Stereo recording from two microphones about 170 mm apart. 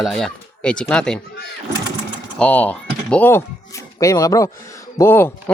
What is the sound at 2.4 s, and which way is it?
Speech, 10° left (ahead or behind).